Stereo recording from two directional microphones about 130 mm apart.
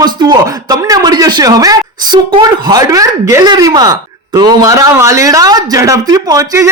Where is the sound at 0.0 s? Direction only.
35° right (ahead or behind).